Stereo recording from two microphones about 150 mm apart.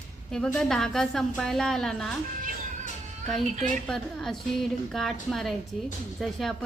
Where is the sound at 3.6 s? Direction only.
5° left (ahead or behind).